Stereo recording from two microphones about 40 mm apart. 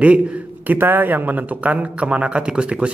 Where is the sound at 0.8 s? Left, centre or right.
Right.